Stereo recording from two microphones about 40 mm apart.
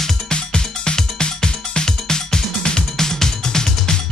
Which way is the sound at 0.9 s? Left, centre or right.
Centre.